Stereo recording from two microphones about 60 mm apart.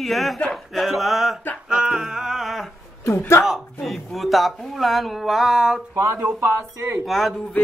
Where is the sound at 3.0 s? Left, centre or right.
Left.